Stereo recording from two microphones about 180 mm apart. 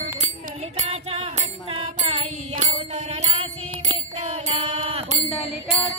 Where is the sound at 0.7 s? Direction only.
35° right (ahead or behind).